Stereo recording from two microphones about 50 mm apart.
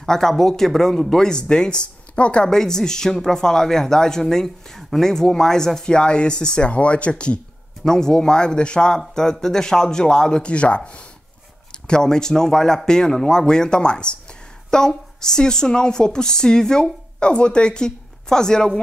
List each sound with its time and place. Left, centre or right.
0.0 s speech: centre
2.5 s speech: centre
11.9 s speech: centre